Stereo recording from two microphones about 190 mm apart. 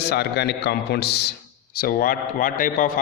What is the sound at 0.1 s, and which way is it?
A man's voice, 60° left (ahead or behind).